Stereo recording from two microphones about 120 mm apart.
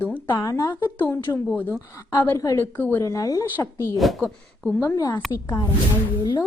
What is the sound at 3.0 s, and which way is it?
Speech, 30° left (ahead or behind).